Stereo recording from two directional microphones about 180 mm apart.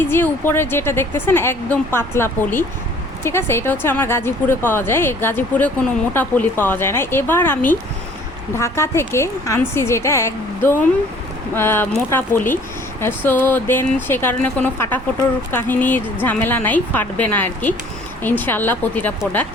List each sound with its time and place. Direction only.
0.1 s speech: 15° left (ahead or behind)